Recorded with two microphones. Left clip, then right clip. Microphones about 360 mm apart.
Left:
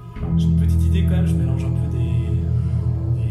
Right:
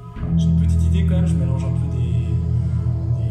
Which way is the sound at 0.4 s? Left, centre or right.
Centre.